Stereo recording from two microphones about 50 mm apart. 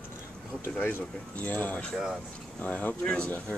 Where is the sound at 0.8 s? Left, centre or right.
Left.